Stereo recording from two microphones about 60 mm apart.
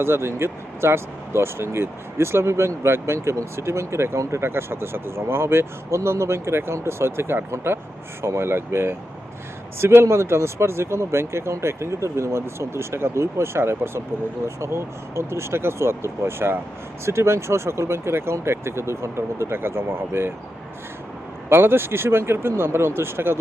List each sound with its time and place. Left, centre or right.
0.0 s speech: right
21.5 s speech: right